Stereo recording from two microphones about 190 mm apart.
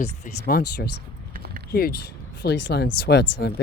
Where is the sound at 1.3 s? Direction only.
50° right (ahead or behind).